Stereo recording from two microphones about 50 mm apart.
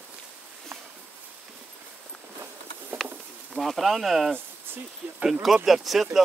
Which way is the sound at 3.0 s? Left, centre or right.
Centre.